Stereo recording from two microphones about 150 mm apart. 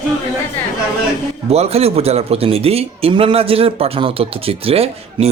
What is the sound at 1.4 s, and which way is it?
A man's voice, 45° right (ahead or behind).